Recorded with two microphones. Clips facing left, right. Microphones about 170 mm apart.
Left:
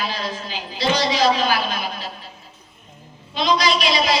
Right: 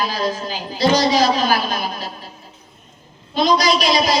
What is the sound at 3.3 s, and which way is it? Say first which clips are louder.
Speech: right 3 dB; 40° right (ahead or behind).